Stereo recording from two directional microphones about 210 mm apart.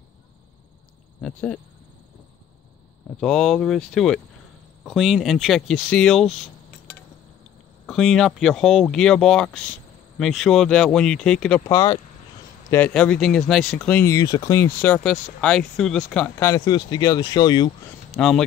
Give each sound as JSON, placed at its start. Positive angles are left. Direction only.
{"t": 1.2, "sound": "speech", "side_deg": 5}
{"t": 3.2, "sound": "speech", "side_deg": 0}
{"t": 7.8, "sound": "speech", "side_deg": 0}
{"t": 11.6, "sound": "speech", "side_deg": 20}
{"t": 12.7, "sound": "speech", "side_deg": 5}
{"t": 18.1, "sound": "speech", "side_deg": 0}